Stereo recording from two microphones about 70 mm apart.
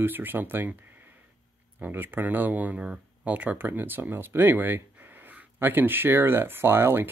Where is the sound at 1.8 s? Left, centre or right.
Right.